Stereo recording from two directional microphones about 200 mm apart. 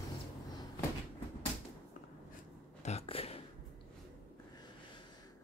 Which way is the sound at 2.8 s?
30° left (ahead or behind).